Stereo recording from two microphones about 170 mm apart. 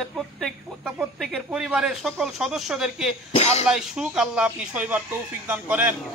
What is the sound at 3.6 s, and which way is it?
A man's voice, 5° right (ahead or behind).